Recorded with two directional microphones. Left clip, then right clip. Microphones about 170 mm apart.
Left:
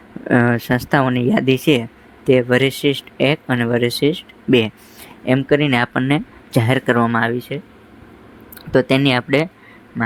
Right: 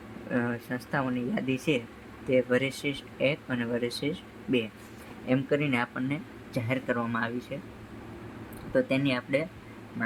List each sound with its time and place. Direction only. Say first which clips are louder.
0.3 s speech: left 15 dB; 50° left (ahead or behind)
8.7 s speech: left 12 dB; 55° left (ahead or behind)